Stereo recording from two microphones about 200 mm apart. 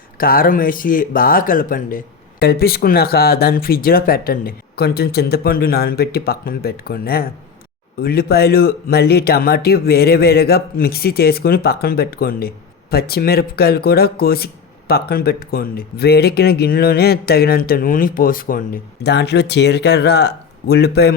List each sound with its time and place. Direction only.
0.2 s speech: 45° left (ahead or behind)